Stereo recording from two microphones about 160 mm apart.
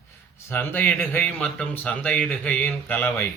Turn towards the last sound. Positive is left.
turn(degrees=10)  # may be behind; listen again after turning